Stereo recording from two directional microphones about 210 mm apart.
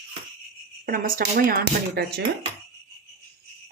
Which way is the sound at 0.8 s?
40° right (ahead or behind).